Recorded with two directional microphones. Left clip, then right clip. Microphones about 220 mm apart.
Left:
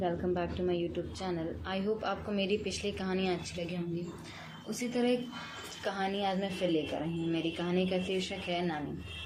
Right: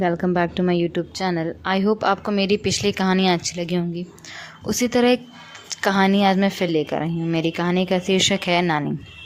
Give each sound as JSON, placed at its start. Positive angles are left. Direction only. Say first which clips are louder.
{"t": 0.0, "sound": "a woman's voice", "louder": "right 12 dB", "side_deg": -45}